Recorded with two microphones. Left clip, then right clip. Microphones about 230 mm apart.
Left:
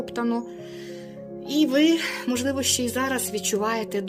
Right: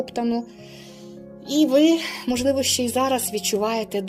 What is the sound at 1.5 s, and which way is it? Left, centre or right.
Speech, centre.